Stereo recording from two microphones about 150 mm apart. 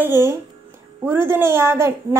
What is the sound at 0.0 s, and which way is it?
A woman's voice, 15° right (ahead or behind).